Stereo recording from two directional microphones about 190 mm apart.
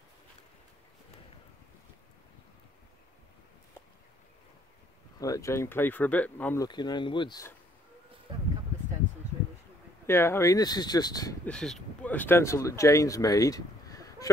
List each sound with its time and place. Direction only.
5.2 s speech: 15° left (ahead or behind)
6.7 s speech: 25° left (ahead or behind)
10.0 s speech: 15° left (ahead or behind)
11.4 s speech: 5° left (ahead or behind)